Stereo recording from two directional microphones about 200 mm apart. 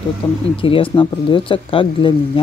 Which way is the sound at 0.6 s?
25° left (ahead or behind).